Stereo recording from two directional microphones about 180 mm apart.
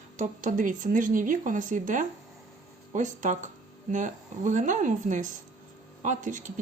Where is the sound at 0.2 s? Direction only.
50° right (ahead or behind).